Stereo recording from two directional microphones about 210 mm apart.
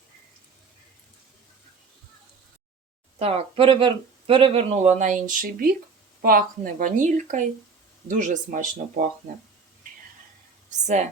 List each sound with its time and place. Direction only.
3.2 s speech: 30° right (ahead or behind)
10.7 s a woman's voice: 35° right (ahead or behind)